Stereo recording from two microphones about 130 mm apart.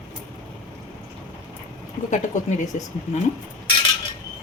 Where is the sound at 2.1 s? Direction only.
75° left (ahead or behind).